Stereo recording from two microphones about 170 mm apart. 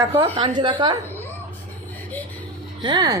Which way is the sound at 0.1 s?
30° right (ahead or behind).